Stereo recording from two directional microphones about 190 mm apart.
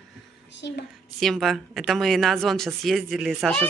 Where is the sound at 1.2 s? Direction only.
Centre (ahead or behind).